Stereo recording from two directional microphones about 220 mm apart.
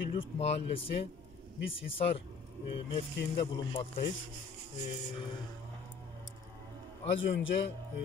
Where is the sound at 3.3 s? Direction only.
25° left (ahead or behind).